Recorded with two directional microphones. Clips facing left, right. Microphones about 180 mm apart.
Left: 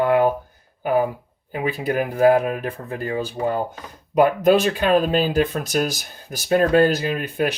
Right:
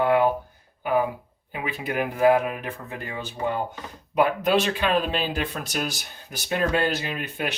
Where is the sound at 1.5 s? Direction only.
40° left (ahead or behind).